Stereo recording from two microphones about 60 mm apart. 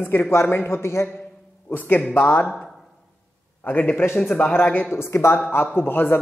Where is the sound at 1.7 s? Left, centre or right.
Left.